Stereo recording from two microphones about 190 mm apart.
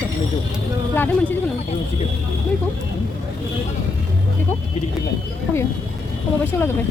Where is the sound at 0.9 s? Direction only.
10° left (ahead or behind).